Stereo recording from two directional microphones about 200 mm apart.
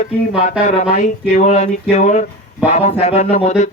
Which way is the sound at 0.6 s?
35° left (ahead or behind).